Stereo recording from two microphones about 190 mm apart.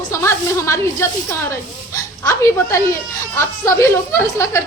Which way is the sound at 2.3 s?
15° left (ahead or behind).